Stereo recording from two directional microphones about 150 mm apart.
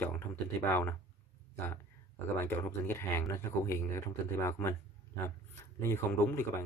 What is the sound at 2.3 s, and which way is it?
Speech, 15° left (ahead or behind).